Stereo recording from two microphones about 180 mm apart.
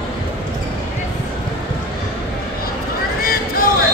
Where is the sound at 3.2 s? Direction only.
55° left (ahead or behind).